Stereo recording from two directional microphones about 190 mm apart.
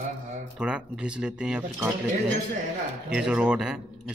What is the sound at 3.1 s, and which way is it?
Speech, 5° right (ahead or behind).